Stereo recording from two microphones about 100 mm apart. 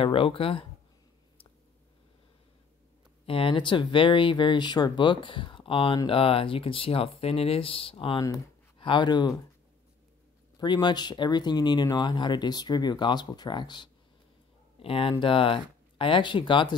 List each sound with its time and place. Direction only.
0.0 s speech: 65° left (ahead or behind)
3.3 s speech: 65° left (ahead or behind)
8.7 s speech: 55° left (ahead or behind)
10.6 s speech: 45° left (ahead or behind)
14.8 s speech: 65° left (ahead or behind)